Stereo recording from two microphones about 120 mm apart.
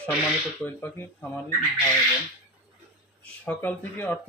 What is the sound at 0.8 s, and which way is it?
Speech, 20° left (ahead or behind).